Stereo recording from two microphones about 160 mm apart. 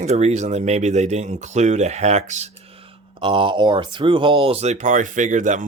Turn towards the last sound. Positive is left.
turn(degrees=-50)  # may be behind; listen again after turning